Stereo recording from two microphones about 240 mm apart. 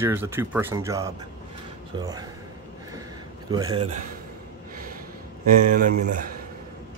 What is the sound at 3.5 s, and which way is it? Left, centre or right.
Speech, centre.